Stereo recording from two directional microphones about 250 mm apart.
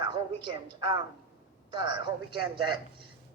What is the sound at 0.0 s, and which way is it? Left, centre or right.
A woman's voice, centre.